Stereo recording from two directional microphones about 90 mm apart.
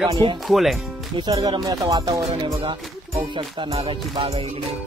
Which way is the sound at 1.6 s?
45° right (ahead or behind).